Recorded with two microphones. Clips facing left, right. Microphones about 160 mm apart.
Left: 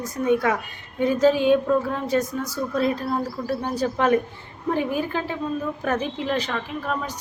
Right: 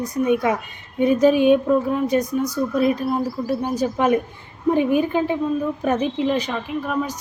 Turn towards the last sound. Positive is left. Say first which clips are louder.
# right 4 dB
turn(degrees=-15)  # may be behind; listen again after turning